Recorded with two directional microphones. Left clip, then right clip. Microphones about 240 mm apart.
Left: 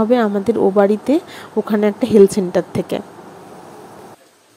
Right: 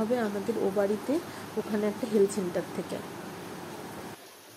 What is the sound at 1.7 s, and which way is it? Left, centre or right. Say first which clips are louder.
Speech: left 14 dB; left.